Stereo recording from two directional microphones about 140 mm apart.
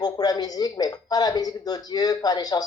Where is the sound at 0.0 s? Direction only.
30° left (ahead or behind).